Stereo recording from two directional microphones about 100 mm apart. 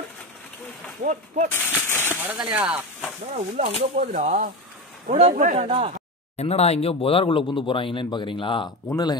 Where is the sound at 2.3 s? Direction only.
10° right (ahead or behind).